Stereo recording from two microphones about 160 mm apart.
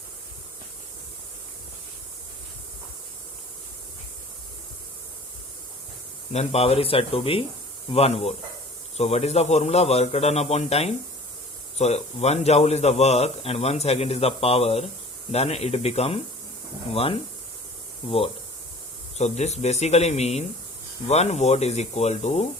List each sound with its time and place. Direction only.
6.3 s a man's voice: 40° left (ahead or behind)
19.1 s speech: 45° left (ahead or behind)